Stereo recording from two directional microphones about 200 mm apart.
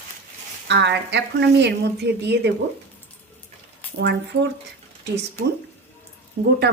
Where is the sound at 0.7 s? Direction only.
60° right (ahead or behind).